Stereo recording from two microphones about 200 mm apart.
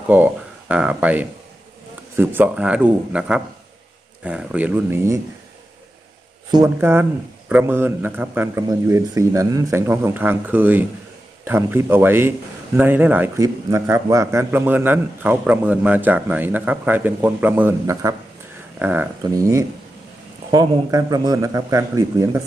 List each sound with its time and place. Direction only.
0.1 s a man's voice: 10° right (ahead or behind)
6.5 s a man's voice: 15° right (ahead or behind)